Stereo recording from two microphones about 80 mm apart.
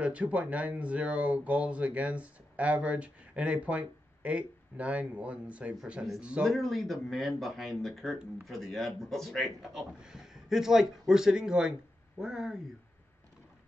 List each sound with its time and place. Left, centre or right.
0.0 s speech: centre
6.5 s speech: centre